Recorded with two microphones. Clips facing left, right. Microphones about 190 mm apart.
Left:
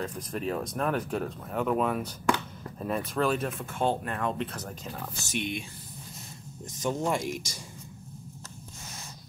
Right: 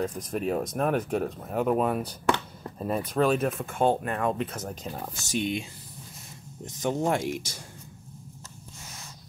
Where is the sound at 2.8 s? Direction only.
40° right (ahead or behind).